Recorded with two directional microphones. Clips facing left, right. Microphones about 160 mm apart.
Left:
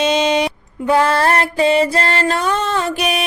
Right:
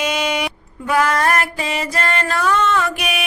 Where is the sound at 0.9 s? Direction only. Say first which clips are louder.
Left 3 dB; 30° left (ahead or behind).